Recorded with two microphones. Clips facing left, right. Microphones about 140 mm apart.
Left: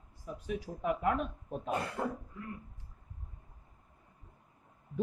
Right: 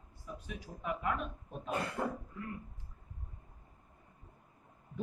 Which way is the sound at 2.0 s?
15° left (ahead or behind).